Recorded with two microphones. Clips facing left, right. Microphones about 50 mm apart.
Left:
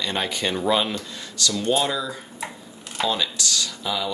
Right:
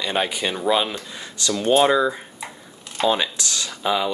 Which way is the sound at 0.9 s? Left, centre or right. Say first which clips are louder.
Left 1 dB; right.